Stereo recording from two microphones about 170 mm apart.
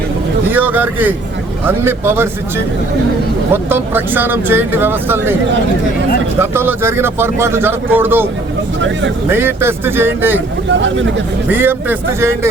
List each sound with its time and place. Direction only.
0.5 s speech: 10° right (ahead or behind)
3.5 s speech: 15° right (ahead or behind)
6.4 s speech: 15° right (ahead or behind)
9.3 s speech: 15° right (ahead or behind)
10.7 s speech: 90° right
11.5 s speech: 10° right (ahead or behind)